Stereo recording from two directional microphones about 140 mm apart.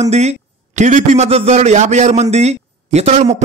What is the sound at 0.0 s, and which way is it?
A man's voice, 50° right (ahead or behind).